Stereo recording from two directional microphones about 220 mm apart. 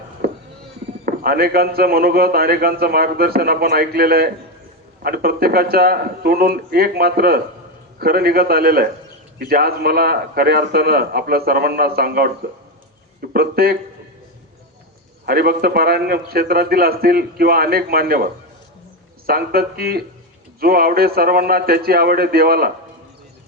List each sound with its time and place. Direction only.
0.2 s sheep: 45° right (ahead or behind)
1.0 s a man's voice: 45° right (ahead or behind)
13.3 s a man's voice: 45° right (ahead or behind)
15.3 s a man's voice: 45° right (ahead or behind)